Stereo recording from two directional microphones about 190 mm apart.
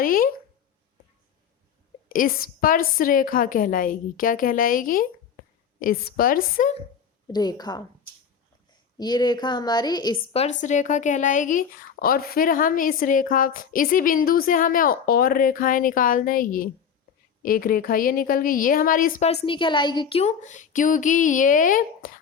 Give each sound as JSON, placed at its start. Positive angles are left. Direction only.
{"t": 0.0, "sound": "a woman's voice", "side_deg": 50}
{"t": 2.0, "sound": "a woman's voice", "side_deg": 50}
{"t": 7.3, "sound": "a woman's voice", "side_deg": 20}
{"t": 9.0, "sound": "a woman's voice", "side_deg": 20}
{"t": 10.6, "sound": "a woman's voice", "side_deg": 40}
{"t": 19.5, "sound": "a woman's voice", "side_deg": 25}